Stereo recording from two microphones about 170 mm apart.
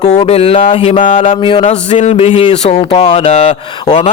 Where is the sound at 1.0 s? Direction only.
45° left (ahead or behind).